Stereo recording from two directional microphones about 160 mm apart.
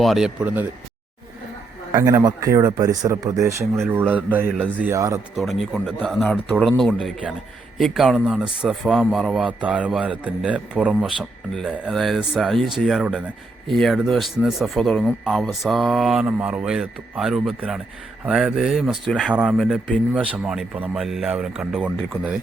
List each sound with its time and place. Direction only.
0.0 s speech: centre (ahead or behind)
1.9 s speech: 20° right (ahead or behind)
4.9 s speech: 20° right (ahead or behind)
5.4 s a man's voice: centre (ahead or behind)